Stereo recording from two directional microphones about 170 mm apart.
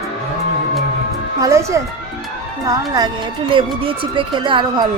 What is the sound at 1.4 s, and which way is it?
Speech, 15° right (ahead or behind).